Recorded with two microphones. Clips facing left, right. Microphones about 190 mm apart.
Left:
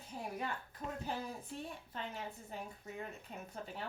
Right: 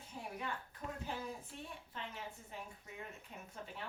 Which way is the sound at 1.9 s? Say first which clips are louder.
Left 3 dB; 40° left (ahead or behind).